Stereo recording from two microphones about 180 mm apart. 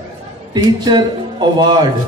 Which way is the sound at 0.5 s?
25° right (ahead or behind).